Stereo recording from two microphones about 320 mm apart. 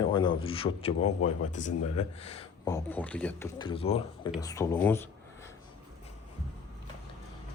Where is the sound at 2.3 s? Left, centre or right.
Centre.